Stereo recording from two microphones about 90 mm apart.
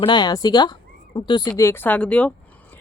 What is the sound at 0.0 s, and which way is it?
Speech, 55° left (ahead or behind).